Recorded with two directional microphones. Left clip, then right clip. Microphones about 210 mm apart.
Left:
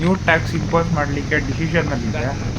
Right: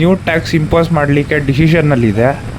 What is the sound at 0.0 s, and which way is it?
Speech, 50° right (ahead or behind).